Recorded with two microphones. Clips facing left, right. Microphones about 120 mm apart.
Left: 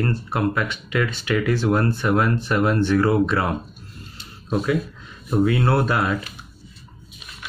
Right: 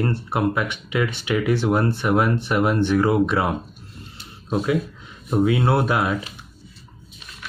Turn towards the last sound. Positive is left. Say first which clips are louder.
# even
turn(degrees=-15)  # may be behind; listen again after turning